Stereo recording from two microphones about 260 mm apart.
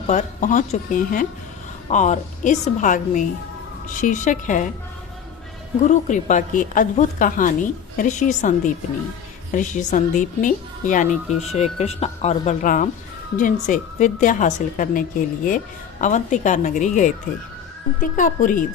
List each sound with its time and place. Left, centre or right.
0.1 s speech: left
5.9 s speech: left